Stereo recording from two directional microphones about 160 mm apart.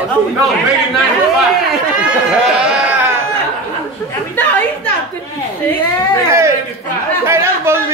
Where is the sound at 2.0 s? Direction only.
5° right (ahead or behind).